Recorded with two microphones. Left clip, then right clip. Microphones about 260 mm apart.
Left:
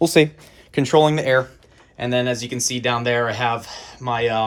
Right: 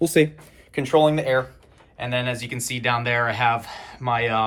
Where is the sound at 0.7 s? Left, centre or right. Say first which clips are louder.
Left 2 dB; left.